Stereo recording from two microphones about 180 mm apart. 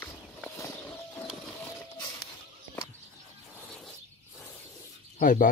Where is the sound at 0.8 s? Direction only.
10° left (ahead or behind).